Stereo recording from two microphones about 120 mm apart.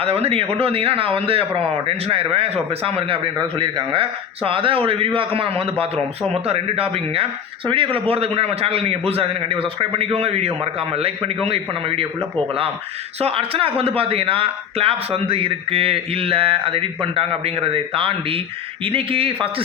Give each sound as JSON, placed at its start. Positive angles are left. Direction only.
{"t": 0.0, "sound": "a man's voice", "side_deg": -55}